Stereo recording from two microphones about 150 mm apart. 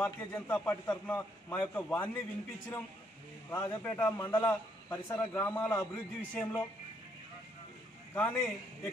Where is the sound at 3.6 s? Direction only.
15° left (ahead or behind).